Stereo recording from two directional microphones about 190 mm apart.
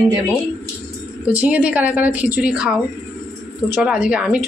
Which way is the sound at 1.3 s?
5° right (ahead or behind).